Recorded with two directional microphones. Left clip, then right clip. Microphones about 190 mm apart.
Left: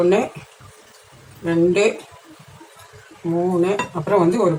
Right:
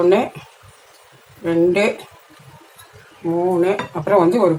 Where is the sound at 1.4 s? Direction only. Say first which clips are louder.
Right 1 dB; 40° right (ahead or behind).